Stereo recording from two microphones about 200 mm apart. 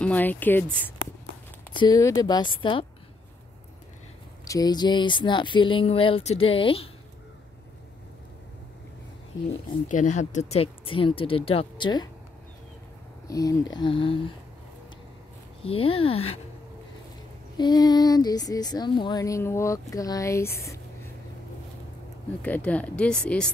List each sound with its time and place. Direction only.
0.0 s speech: 10° left (ahead or behind); by 2.9 s 25° left (ahead or behind)
4.5 s speech: 20° left (ahead or behind)
9.8 s speech: 40° left (ahead or behind); by 12.1 s 20° left (ahead or behind)
13.3 s speech: 15° left (ahead or behind)
15.6 s speech: 30° left (ahead or behind)
17.6 s speech: 20° left (ahead or behind)
22.4 s speech: 5° left (ahead or behind)